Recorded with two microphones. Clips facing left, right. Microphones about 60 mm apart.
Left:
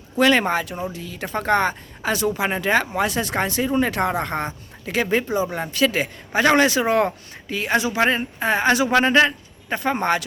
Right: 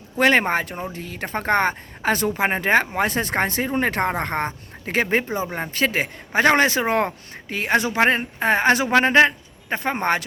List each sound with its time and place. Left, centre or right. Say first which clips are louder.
0.2 s speech: even; right